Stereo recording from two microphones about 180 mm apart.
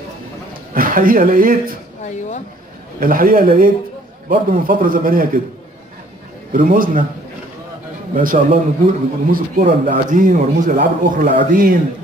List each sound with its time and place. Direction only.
0.5 s a man's voice: 50° right (ahead or behind)
2.0 s speech: 40° left (ahead or behind)
3.0 s speech: 50° right (ahead or behind)
6.5 s speech: 50° right (ahead or behind)
8.1 s speech: 50° right (ahead or behind)